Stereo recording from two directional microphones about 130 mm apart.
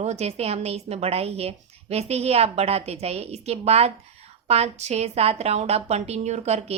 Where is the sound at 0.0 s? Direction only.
55° right (ahead or behind).